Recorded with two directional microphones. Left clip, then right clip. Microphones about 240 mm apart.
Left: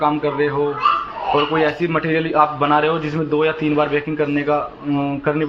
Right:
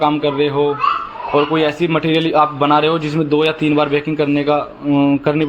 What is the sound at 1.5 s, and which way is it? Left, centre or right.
A man's voice, right.